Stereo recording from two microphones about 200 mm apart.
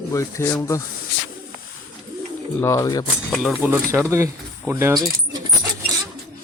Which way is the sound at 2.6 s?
15° left (ahead or behind).